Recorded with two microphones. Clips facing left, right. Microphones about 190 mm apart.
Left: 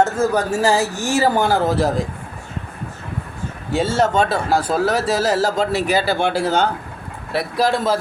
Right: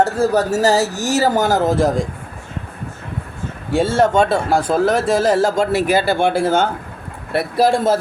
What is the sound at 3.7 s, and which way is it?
Speech, 55° right (ahead or behind).